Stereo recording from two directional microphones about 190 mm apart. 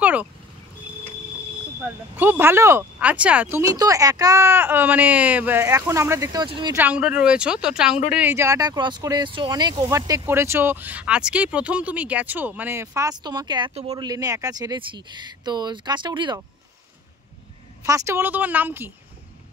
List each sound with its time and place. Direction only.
0.0 s vehicle: 10° right (ahead or behind)
2.1 s speech: 10° right (ahead or behind)
6.8 s speech: 5° right (ahead or behind)
13.7 s speech: 30° right (ahead or behind)
14.0 s speech: 20° right (ahead or behind)
17.8 s speech: 15° right (ahead or behind)